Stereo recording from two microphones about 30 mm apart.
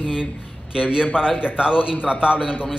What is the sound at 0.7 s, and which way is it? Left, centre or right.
A man's voice, right.